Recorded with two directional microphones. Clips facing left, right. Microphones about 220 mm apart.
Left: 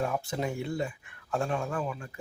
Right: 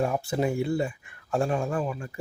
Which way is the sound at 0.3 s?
10° right (ahead or behind).